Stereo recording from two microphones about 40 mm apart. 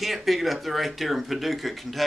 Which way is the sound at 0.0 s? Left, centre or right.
Centre.